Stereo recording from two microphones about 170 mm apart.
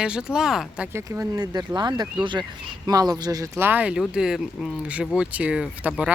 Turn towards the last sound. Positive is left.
turn(degrees=-5)  # may be behind; listen again after turning